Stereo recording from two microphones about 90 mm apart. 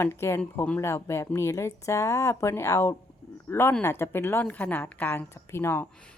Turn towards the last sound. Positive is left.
turn(degrees=25)  # may be behind; listen again after turning